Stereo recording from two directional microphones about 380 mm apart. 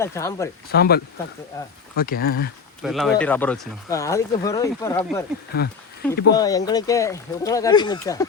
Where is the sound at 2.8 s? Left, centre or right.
Centre.